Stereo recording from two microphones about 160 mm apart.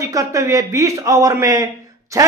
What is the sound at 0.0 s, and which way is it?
Speech, 20° right (ahead or behind).